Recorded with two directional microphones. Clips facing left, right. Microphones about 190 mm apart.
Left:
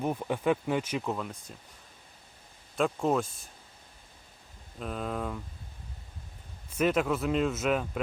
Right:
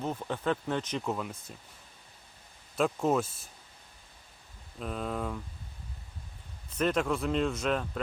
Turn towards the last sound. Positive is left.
turn(degrees=5)  # may be behind; listen again after turning